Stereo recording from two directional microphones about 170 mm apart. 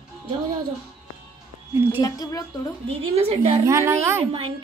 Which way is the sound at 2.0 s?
20° left (ahead or behind).